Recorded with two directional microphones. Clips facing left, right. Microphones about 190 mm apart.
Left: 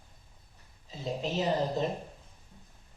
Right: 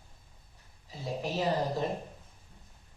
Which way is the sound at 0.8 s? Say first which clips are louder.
Left 1 dB; 20° left (ahead or behind).